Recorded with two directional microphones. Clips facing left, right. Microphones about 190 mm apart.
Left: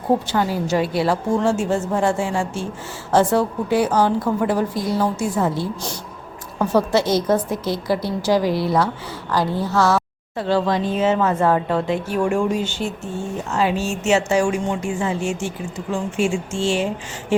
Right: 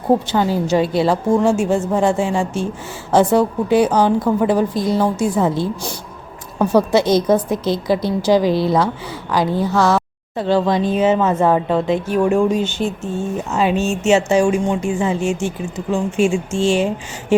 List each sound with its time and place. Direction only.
0.3 s a woman's voice: 20° right (ahead or behind)